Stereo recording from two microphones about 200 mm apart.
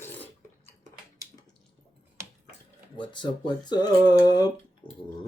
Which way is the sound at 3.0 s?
25° left (ahead or behind).